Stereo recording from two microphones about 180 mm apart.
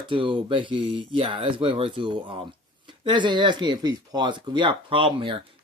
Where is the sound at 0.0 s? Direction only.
25° right (ahead or behind).